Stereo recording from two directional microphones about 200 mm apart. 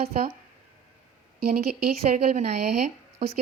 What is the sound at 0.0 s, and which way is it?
Speech, 35° right (ahead or behind).